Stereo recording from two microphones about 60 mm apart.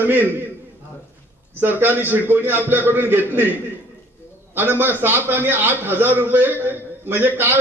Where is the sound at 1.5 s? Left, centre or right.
Right.